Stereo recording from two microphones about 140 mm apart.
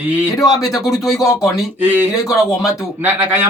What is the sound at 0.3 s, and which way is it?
Music, 25° left (ahead or behind).